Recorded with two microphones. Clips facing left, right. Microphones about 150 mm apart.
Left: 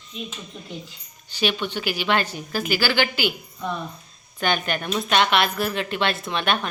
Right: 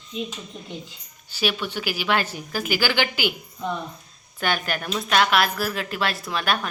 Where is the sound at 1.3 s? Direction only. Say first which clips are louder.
Left 1 dB; 10° right (ahead or behind).